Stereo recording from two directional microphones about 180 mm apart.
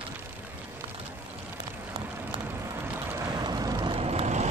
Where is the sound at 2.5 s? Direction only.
10° right (ahead or behind); by 4.4 s 35° right (ahead or behind).